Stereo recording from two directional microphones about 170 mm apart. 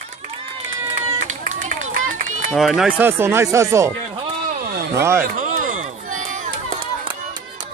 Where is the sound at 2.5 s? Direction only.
Centre (ahead or behind).